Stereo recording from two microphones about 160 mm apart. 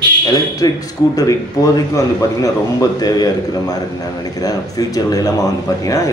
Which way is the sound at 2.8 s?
25° left (ahead or behind).